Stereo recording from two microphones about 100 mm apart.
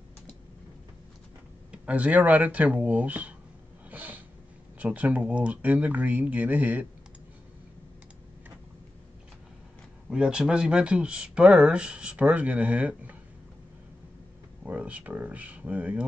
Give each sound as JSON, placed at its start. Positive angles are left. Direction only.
{"t": 1.7, "sound": "speech", "side_deg": -15}
{"t": 3.9, "sound": "a sound", "side_deg": -15}
{"t": 4.7, "sound": "speech", "side_deg": -15}
{"t": 10.0, "sound": "speech", "side_deg": -10}
{"t": 14.6, "sound": "speech", "side_deg": -15}